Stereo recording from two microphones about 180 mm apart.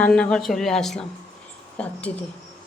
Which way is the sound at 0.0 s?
5° left (ahead or behind).